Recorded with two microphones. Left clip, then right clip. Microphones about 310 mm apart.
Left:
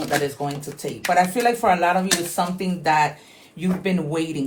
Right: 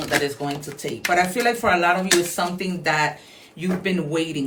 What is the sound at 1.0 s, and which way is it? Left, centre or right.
Speech, centre.